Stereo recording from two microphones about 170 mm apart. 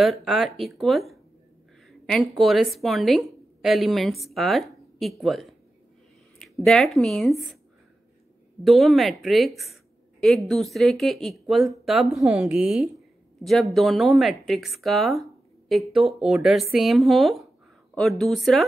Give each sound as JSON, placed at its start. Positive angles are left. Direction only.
{"t": 0.0, "sound": "a woman's voice", "side_deg": 0}
{"t": 8.6, "sound": "a woman's voice", "side_deg": 0}